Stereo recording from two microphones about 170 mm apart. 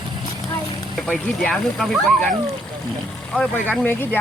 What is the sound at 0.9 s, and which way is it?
Speech, 5° left (ahead or behind).